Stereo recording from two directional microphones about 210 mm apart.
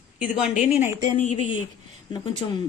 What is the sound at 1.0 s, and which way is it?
A woman's voice, 35° left (ahead or behind).